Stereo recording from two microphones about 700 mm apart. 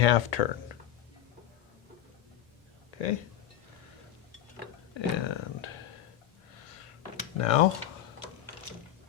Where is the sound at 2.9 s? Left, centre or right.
Left.